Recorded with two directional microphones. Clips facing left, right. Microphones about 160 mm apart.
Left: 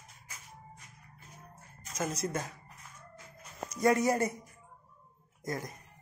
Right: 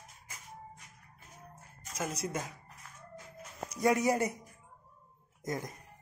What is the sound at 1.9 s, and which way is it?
Speech, 10° right (ahead or behind).